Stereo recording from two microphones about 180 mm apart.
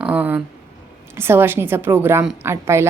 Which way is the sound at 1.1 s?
15° right (ahead or behind).